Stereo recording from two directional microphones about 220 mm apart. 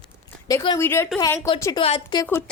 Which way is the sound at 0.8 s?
10° left (ahead or behind).